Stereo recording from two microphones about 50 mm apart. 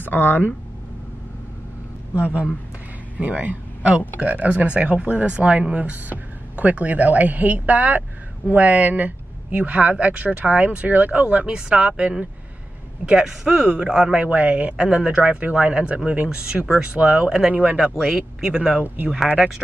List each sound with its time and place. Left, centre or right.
0.0 s speech: left
2.1 s speech: right
14.2 s speech: right
17.9 s speech: centre